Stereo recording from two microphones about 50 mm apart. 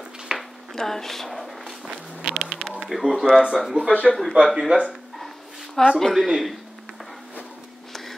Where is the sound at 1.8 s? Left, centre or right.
Centre.